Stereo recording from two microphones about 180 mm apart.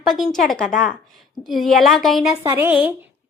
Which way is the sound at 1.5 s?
Centre (ahead or behind).